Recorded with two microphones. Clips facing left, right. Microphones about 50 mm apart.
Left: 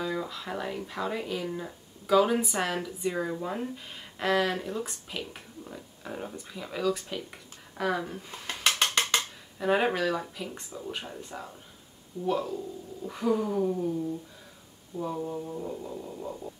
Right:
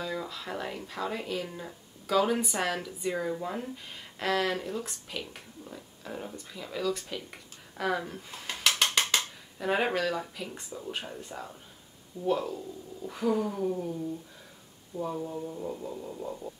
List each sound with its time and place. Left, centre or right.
0.0 s speech: centre
8.8 s percussion: centre
9.6 s speech: centre
15.0 s speech: centre
15.2 s speech: centre
15.6 s speech: centre